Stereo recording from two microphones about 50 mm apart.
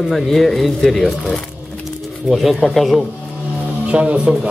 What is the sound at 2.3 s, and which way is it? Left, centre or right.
Speech, centre.